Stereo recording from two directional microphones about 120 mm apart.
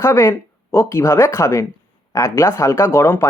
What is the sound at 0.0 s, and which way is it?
Speech, 25° left (ahead or behind).